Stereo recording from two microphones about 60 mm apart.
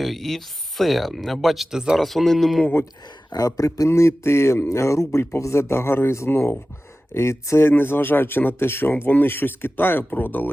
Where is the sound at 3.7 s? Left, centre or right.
Left.